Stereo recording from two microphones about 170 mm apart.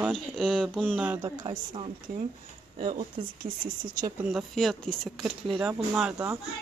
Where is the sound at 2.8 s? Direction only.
45° right (ahead or behind).